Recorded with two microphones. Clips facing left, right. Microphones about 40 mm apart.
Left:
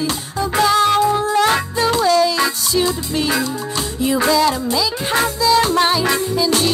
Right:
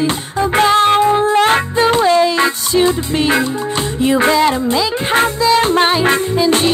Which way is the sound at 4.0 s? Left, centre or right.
Right.